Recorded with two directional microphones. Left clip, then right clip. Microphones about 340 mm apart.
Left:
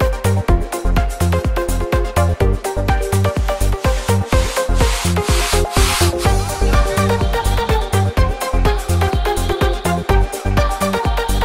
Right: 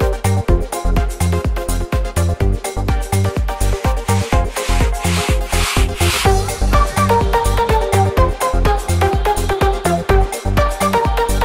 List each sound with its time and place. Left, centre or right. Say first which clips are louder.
0.0 s music: even; centre
6.2 s music: right 2 dB; centre